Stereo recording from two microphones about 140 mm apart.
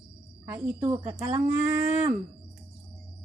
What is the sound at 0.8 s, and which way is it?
Speech, 35° right (ahead or behind).